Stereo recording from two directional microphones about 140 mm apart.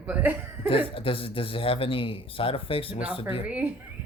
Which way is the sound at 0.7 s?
40° left (ahead or behind).